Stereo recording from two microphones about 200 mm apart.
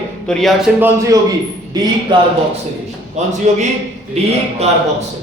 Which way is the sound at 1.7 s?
20° right (ahead or behind).